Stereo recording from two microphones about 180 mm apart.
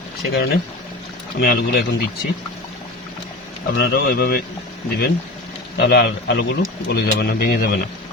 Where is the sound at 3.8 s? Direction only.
60° left (ahead or behind).